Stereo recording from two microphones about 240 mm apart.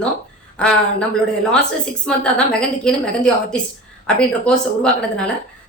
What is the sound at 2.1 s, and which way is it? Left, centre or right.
A woman's voice, centre.